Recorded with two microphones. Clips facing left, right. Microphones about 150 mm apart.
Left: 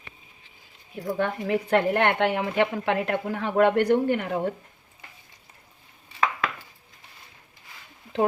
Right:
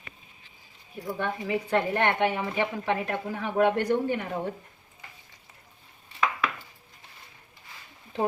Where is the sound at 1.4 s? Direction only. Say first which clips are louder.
Left 4 dB; 65° left (ahead or behind).